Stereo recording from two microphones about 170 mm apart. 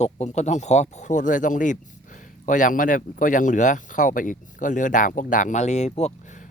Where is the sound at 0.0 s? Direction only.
40° left (ahead or behind).